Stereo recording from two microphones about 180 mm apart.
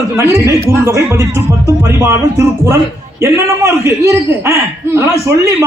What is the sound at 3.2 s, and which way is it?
Speech, 15° right (ahead or behind).